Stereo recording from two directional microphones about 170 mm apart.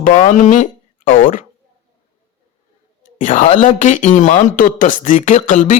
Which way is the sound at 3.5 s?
50° left (ahead or behind).